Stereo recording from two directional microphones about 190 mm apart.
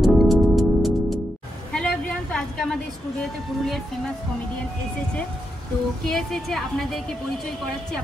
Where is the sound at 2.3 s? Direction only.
5° left (ahead or behind).